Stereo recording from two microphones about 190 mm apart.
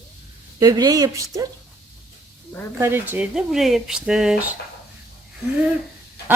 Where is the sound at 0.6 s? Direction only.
20° right (ahead or behind).